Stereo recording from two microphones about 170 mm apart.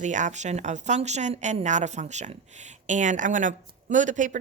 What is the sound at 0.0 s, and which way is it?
Speech, 45° right (ahead or behind).